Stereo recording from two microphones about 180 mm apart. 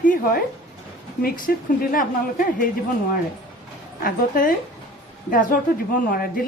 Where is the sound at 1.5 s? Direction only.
55° left (ahead or behind).